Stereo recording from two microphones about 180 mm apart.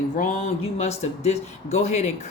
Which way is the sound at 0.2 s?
40° left (ahead or behind).